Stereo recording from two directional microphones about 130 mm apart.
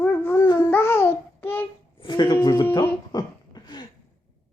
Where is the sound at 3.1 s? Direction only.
35° left (ahead or behind).